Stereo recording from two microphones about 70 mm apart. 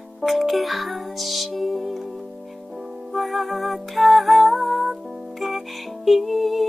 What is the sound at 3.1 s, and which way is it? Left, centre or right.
Music, centre.